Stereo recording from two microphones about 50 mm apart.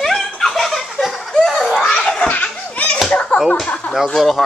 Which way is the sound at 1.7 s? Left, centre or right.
Centre.